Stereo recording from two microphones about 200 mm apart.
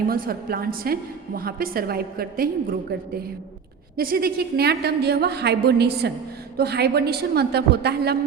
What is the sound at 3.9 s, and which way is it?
A man's voice, 50° right (ahead or behind).